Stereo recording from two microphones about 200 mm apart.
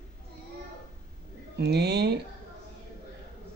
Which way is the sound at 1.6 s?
55° right (ahead or behind).